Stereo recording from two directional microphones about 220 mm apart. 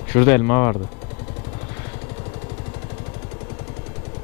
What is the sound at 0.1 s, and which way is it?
Speech, 10° left (ahead or behind).